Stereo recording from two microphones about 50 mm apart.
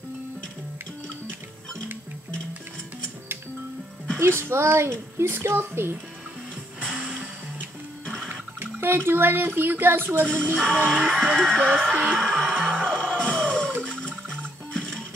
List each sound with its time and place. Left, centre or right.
4.2 s speech: right
8.0 s printer: centre
8.3 s a sound: right
9.6 s speech: right
10.5 s music: centre